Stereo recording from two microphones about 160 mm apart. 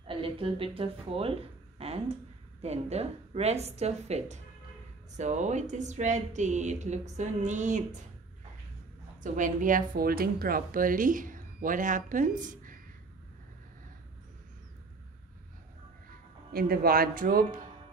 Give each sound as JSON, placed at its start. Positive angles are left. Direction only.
{"t": 0.0, "sound": "a woman's voice", "side_deg": -35}
{"t": 9.2, "sound": "speech", "side_deg": -55}
{"t": 16.5, "sound": "speech", "side_deg": -70}